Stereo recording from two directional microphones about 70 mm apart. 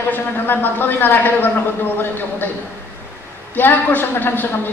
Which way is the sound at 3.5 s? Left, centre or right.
Left.